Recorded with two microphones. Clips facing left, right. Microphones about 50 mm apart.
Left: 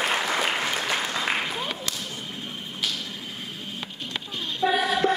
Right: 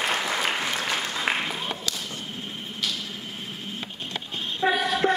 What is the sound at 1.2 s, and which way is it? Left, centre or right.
Applause, centre.